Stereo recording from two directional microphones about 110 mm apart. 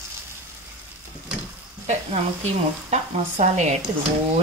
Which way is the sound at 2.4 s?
90° right.